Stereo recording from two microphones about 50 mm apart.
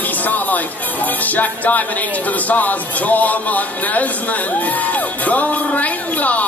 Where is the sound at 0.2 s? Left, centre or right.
Left.